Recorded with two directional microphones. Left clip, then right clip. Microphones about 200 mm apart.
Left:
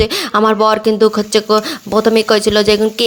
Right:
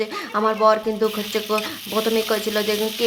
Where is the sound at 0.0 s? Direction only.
40° left (ahead or behind).